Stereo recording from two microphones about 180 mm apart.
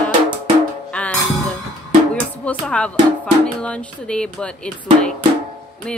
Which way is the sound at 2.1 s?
5° left (ahead or behind).